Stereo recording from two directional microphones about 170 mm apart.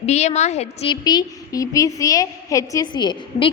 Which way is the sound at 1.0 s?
20° left (ahead or behind).